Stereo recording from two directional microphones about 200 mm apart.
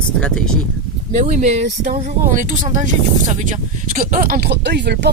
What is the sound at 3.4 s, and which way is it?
Speech, 40° right (ahead or behind).